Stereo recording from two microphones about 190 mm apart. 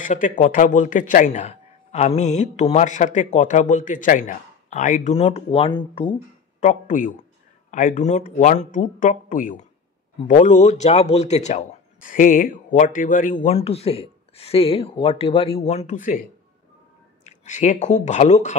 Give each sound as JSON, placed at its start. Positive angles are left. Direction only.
{"t": 0.0, "sound": "speech", "side_deg": 40}
{"t": 6.6, "sound": "speech", "side_deg": 45}